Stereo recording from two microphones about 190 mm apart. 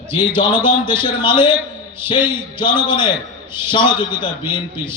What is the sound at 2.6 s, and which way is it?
A man's voice, 25° left (ahead or behind).